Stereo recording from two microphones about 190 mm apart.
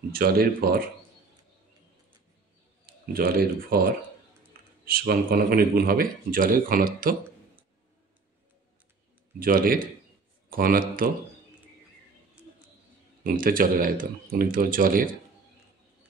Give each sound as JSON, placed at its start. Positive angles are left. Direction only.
{"t": 0.1, "sound": "speech", "side_deg": -50}
{"t": 3.1, "sound": "speech", "side_deg": -50}
{"t": 9.4, "sound": "speech", "side_deg": -50}
{"t": 13.2, "sound": "speech", "side_deg": -50}